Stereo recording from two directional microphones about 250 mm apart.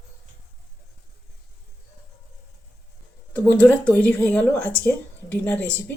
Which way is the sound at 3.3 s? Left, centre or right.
Centre.